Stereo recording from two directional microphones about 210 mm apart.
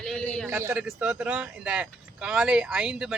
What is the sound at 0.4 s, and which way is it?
A man's voice, 10° right (ahead or behind).